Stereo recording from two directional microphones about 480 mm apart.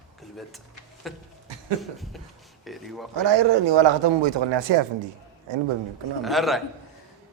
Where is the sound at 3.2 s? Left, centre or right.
Right.